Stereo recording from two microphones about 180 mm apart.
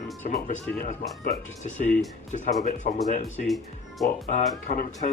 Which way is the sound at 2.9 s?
55° left (ahead or behind).